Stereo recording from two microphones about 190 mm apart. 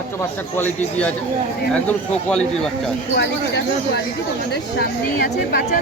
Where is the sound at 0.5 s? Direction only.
10° left (ahead or behind).